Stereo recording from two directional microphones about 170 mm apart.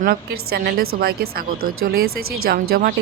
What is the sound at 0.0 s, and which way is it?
A woman's voice, 65° right (ahead or behind).